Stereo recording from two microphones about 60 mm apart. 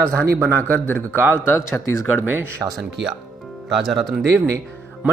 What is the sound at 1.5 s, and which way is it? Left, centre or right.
Speech, left.